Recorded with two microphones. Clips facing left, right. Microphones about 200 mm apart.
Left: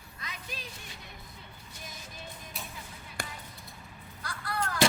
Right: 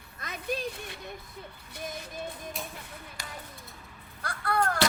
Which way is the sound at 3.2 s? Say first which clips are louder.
Left 7 dB; 55° left (ahead or behind).